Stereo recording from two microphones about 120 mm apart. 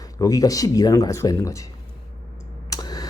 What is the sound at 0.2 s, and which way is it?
Speech, 30° left (ahead or behind).